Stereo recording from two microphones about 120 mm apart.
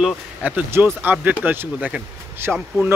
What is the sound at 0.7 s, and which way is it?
Speech, 20° right (ahead or behind).